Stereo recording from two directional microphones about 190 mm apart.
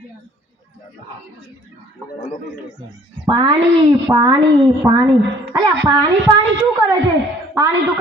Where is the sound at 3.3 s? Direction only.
20° right (ahead or behind).